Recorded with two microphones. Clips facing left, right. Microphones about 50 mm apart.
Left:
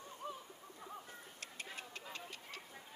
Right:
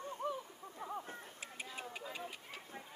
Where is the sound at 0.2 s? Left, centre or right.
Right.